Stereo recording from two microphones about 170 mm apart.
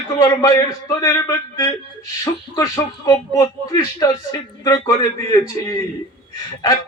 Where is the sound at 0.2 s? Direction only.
20° left (ahead or behind).